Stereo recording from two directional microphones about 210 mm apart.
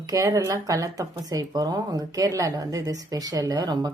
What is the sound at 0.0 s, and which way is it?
Speech, 15° right (ahead or behind).